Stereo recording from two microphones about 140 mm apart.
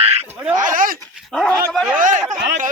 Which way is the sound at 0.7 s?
80° right.